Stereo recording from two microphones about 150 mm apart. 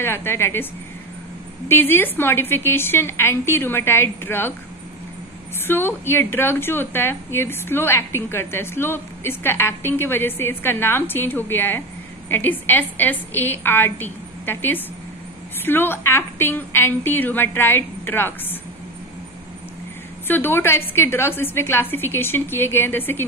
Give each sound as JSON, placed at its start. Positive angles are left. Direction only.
{"t": 0.0, "sound": "a woman's voice", "side_deg": 15}
{"t": 1.7, "sound": "a woman's voice", "side_deg": 15}
{"t": 5.7, "sound": "a woman's voice", "side_deg": 15}
{"t": 20.2, "sound": "a woman's voice", "side_deg": 15}